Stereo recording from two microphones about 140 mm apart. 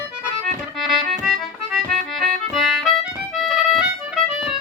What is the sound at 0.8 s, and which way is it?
Music, centre (ahead or behind).